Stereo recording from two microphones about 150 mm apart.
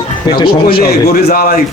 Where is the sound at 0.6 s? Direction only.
85° left.